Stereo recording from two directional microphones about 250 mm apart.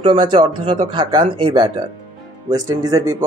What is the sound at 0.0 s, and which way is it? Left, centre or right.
Speech, right.